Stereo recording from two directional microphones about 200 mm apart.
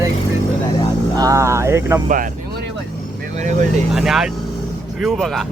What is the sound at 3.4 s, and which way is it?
Speech, 40° right (ahead or behind).